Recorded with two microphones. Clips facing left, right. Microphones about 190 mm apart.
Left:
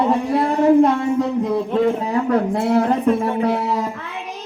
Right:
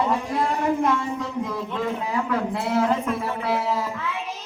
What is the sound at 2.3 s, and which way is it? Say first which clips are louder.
Speech: left 6 dB; 55° left (ahead or behind).